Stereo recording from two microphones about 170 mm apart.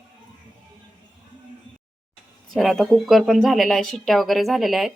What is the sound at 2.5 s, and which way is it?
Speech, centre (ahead or behind).